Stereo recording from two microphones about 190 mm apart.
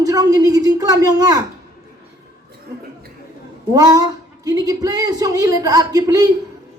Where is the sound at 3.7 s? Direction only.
20° right (ahead or behind).